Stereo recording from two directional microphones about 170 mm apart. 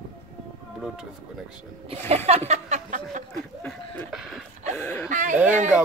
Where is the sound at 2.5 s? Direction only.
45° right (ahead or behind).